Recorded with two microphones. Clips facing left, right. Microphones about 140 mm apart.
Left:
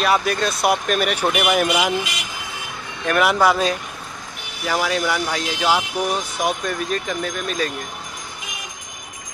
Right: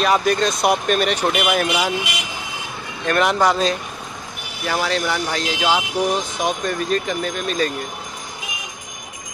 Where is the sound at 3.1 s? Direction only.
5° left (ahead or behind).